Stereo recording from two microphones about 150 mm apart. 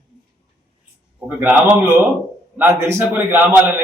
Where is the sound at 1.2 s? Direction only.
10° right (ahead or behind).